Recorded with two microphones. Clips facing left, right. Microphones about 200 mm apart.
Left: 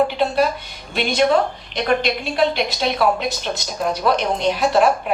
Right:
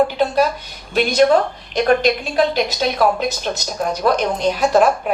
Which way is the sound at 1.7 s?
45° right (ahead or behind).